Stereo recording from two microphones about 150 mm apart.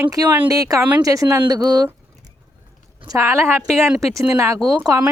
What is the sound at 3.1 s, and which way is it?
Speech, 20° right (ahead or behind).